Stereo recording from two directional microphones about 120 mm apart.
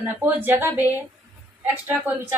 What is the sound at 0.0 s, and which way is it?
Speech, 15° right (ahead or behind).